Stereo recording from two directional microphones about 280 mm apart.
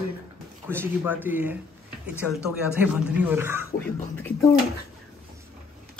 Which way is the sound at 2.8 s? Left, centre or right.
Centre.